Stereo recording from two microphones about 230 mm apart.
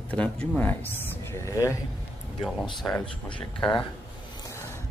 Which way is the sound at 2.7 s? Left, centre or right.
Centre.